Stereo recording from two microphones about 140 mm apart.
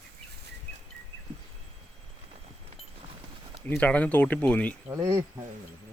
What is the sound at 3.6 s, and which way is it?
Speech, 10° left (ahead or behind).